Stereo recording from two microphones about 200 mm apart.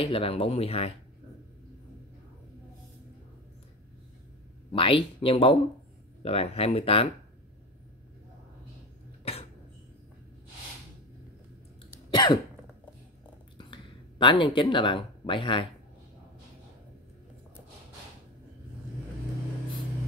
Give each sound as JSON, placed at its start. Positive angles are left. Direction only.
{"t": 0.0, "sound": "speech", "side_deg": 25}
{"t": 4.7, "sound": "speech", "side_deg": 25}
{"t": 9.2, "sound": "a sound", "side_deg": 30}
{"t": 12.1, "sound": "cough", "side_deg": 25}
{"t": 13.6, "sound": "speech", "side_deg": 25}